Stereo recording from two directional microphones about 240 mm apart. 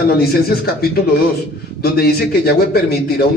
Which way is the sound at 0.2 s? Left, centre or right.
Left.